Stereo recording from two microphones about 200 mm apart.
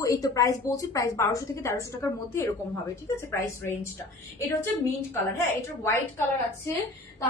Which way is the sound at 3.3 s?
10° left (ahead or behind).